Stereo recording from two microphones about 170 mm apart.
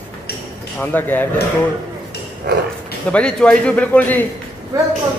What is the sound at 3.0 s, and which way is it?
Speech, 5° left (ahead or behind).